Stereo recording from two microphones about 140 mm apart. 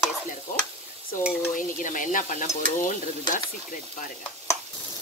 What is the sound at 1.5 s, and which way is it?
Stir, 70° left (ahead or behind).